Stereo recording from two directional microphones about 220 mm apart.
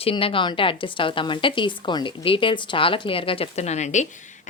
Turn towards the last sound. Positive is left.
turn(degrees=30)  # may be behind; listen again after turning